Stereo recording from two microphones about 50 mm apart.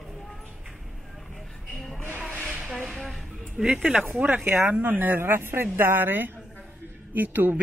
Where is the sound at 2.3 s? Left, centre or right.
Right.